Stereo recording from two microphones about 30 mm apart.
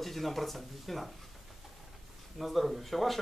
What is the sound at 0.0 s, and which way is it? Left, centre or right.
Speech, centre.